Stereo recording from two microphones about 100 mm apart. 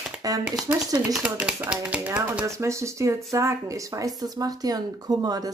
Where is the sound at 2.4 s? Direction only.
30° right (ahead or behind).